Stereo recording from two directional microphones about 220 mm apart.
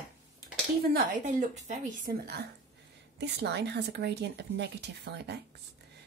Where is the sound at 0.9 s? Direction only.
35° right (ahead or behind).